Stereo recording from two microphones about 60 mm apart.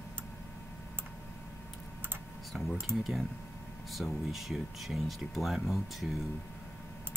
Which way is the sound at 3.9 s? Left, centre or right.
Centre.